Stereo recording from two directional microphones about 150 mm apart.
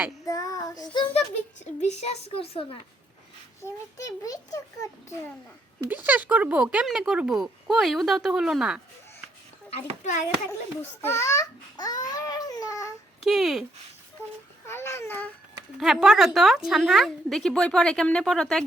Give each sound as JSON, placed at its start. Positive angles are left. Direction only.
{"t": 0.3, "sound": "child singing", "side_deg": 25}
{"t": 1.8, "sound": "a woman's voice", "side_deg": 50}
{"t": 3.9, "sound": "babbling", "side_deg": 20}
{"t": 5.9, "sound": "speech", "side_deg": -10}
{"t": 9.6, "sound": "a woman's voice", "side_deg": 45}
{"t": 11.0, "sound": "babbling", "side_deg": 20}
{"t": 13.2, "sound": "speech", "side_deg": 0}
{"t": 14.7, "sound": "speech", "side_deg": 15}
{"t": 15.8, "sound": "speech", "side_deg": -5}